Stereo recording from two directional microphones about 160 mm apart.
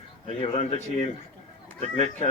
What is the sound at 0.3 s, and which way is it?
Speech, 40° left (ahead or behind).